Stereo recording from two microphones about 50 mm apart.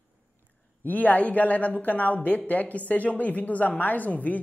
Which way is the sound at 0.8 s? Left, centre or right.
Left.